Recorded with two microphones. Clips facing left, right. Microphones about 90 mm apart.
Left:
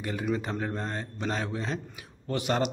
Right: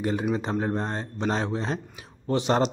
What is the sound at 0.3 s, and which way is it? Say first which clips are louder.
A man's voice: right 4 dB; 25° right (ahead or behind).